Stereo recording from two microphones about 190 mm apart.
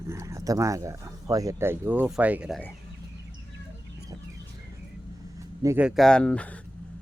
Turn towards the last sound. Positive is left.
turn(degrees=5)  # may be behind; listen again after turning